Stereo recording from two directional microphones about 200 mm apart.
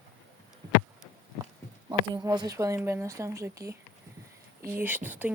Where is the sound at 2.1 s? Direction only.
20° right (ahead or behind).